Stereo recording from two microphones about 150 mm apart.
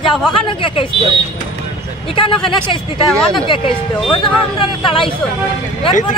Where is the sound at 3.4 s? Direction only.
35° left (ahead or behind).